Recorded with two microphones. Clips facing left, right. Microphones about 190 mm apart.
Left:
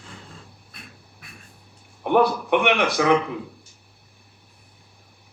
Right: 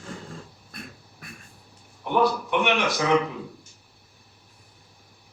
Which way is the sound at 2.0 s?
60° left (ahead or behind).